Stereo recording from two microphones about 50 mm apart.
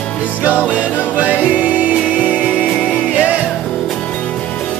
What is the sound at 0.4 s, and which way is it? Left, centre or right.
Music, right.